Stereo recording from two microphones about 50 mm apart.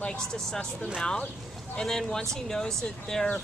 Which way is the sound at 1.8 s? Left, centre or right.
Centre.